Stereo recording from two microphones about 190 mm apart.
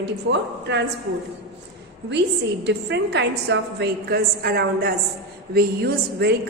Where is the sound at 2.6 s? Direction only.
65° right (ahead or behind).